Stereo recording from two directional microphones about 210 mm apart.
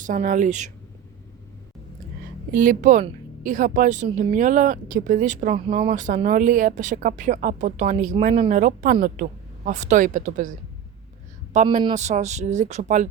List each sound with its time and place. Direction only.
0.0 s a woman's voice: 40° right (ahead or behind)
2.5 s a woman's voice: 40° right (ahead or behind)
11.5 s a woman's voice: 35° right (ahead or behind)